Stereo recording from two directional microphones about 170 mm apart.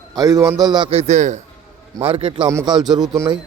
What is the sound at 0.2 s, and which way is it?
Speech, 20° right (ahead or behind).